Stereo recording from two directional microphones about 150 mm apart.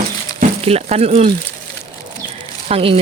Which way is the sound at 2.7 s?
40° right (ahead or behind).